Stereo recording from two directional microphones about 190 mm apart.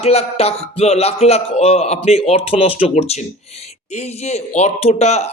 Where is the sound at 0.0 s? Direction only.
30° left (ahead or behind).